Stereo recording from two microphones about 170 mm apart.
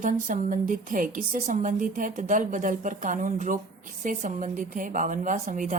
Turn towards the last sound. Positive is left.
turn(degrees=-50)  # may be behind; listen again after turning